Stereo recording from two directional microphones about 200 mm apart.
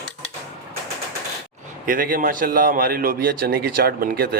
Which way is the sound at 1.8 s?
45° right (ahead or behind).